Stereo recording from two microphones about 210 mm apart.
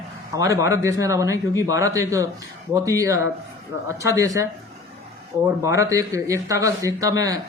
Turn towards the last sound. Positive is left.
turn(degrees=-15)  # may be behind; listen again after turning